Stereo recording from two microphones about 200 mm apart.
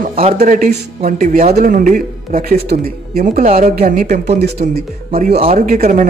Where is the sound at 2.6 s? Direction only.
45° right (ahead or behind).